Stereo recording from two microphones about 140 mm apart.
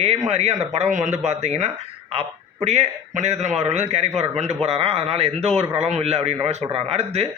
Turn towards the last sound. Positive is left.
turn(degrees=-50)  # may be behind; listen again after turning